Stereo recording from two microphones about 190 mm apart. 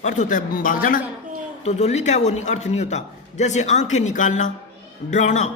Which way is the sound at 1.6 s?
35° left (ahead or behind).